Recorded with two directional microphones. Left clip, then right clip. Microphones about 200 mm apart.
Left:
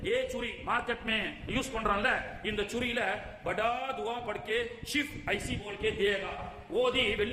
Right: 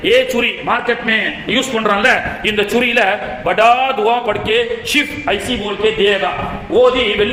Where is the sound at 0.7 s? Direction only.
15° left (ahead or behind).